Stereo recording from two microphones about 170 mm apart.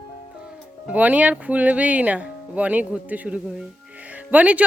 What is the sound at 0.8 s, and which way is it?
Speech, 10° right (ahead or behind).